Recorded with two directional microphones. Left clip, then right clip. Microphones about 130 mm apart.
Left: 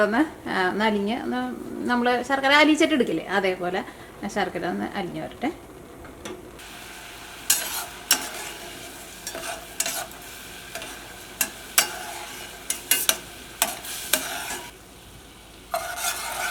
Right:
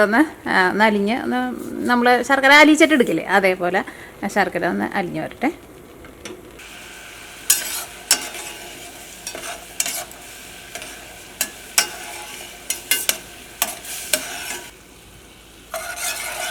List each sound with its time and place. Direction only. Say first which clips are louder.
0.0 s a woman's voice: right 6 dB; 35° right (ahead or behind)
7.4 s stir: right 4 dB; centre (ahead or behind)
10.7 s a sound: right 2 dB; centre (ahead or behind)
11.3 s stir: right 2 dB; centre (ahead or behind)
15.7 s stir: right 1 dB; centre (ahead or behind)